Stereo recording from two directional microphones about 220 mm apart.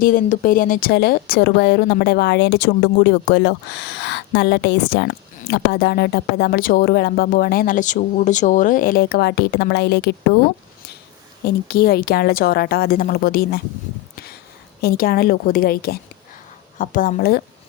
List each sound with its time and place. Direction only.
0.0 s speech: 40° left (ahead or behind)
11.4 s speech: 45° left (ahead or behind)
14.8 s a woman's voice: 45° left (ahead or behind)